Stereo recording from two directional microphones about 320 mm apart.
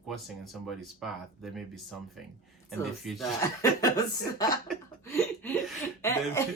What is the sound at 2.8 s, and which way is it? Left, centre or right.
Speech, centre.